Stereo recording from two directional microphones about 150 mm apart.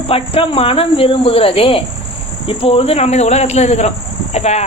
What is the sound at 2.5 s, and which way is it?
Speech, 40° left (ahead or behind).